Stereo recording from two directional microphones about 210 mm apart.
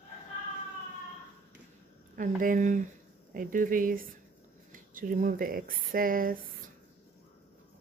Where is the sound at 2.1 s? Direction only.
40° right (ahead or behind).